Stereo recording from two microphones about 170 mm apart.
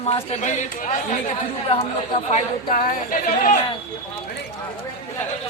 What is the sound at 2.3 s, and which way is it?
Speech, 55° left (ahead or behind).